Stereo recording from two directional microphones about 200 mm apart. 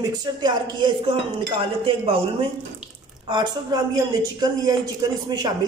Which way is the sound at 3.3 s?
20° right (ahead or behind).